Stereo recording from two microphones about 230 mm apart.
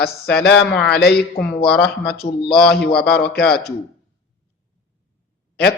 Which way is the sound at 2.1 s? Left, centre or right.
Left.